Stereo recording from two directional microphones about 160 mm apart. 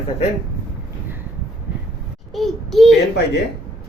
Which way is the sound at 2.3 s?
Centre (ahead or behind).